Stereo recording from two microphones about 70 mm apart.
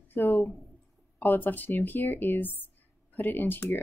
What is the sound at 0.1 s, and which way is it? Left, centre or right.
A woman's voice, left.